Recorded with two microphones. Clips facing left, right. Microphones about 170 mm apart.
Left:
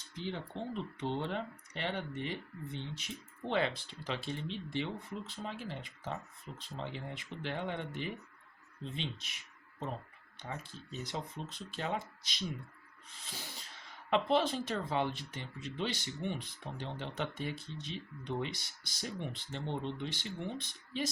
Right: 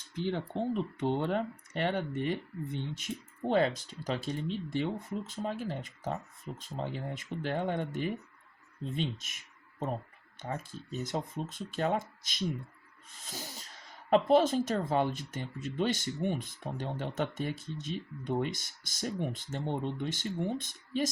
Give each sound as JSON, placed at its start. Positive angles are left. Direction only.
{"t": 0.3, "sound": "speech", "side_deg": -50}
{"t": 10.4, "sound": "speech", "side_deg": -45}
{"t": 14.1, "sound": "speech", "side_deg": -45}